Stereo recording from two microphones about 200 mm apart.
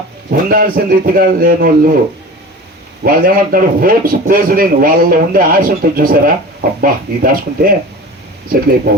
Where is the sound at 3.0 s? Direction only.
45° right (ahead or behind).